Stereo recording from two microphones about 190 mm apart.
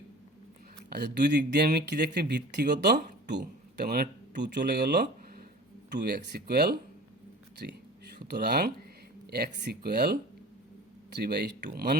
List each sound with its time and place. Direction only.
0.9 s speech: 60° right (ahead or behind)